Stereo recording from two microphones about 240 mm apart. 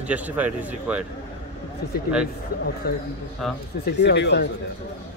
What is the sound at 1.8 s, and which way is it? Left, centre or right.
A man's voice, left.